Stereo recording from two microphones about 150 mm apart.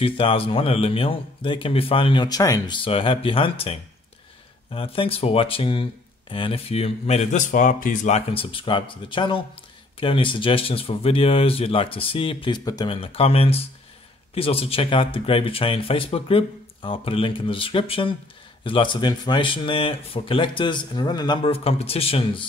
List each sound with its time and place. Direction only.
0.0 s speech: 40° left (ahead or behind); by 8.2 s 60° left (ahead or behind)
8.3 s speech: 35° left (ahead or behind)